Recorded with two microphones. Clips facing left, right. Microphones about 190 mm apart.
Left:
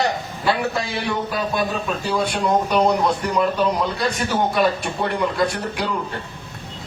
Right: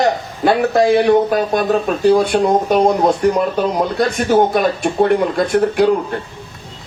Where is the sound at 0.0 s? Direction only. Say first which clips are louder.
Right 6 dB; 50° right (ahead or behind).